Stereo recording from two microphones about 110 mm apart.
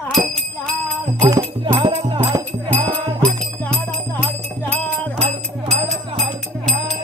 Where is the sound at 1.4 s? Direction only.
50° right (ahead or behind).